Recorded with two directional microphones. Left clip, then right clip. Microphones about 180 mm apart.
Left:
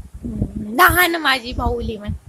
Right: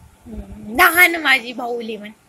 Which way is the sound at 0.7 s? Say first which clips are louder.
Right 1 dB; 15° left (ahead or behind).